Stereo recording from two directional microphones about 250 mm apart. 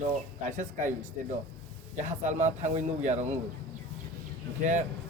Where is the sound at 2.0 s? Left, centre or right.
Right.